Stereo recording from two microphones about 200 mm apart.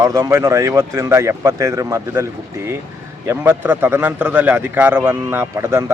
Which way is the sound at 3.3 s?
10° right (ahead or behind).